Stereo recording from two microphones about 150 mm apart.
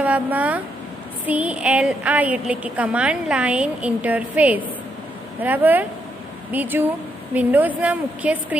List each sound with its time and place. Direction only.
0.0 s a woman's voice: 10° right (ahead or behind)